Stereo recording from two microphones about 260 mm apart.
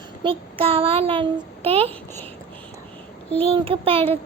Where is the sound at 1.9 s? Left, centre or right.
Centre.